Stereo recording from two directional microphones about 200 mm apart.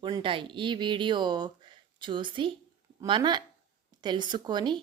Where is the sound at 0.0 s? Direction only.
25° right (ahead or behind).